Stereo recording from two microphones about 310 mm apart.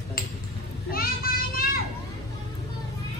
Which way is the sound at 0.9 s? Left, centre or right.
Left.